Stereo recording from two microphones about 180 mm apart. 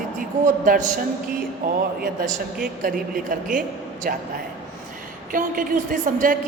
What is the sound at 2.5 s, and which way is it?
A woman's voice, 50° right (ahead or behind).